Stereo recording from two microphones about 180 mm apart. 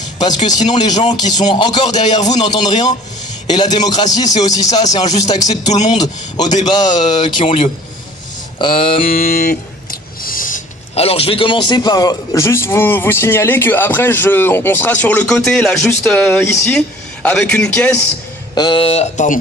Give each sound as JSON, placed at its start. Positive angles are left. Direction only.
{"t": 0.0, "sound": "a sound", "side_deg": 25}
{"t": 0.7, "sound": "a man's voice", "side_deg": 25}
{"t": 9.1, "sound": "music", "side_deg": 55}
{"t": 10.9, "sound": "a man's voice", "side_deg": 35}
{"t": 18.5, "sound": "speech", "side_deg": 25}